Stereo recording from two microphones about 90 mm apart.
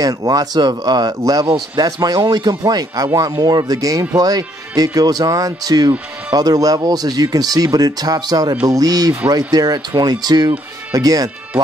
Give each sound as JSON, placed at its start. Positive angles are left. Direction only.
{"t": 0.0, "sound": "speech", "side_deg": -45}